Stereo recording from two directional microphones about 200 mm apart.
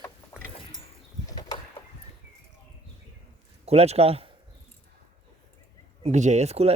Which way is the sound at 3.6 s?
30° right (ahead or behind).